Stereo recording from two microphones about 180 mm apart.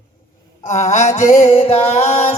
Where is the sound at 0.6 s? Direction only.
40° left (ahead or behind).